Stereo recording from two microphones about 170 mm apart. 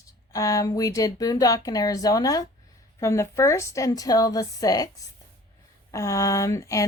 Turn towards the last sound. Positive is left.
turn(degrees=15)  # may be behind; listen again after turning